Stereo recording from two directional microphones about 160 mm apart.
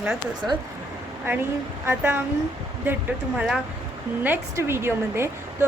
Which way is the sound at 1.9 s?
15° right (ahead or behind).